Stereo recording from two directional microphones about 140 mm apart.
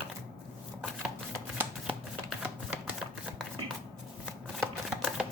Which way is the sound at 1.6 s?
10° right (ahead or behind).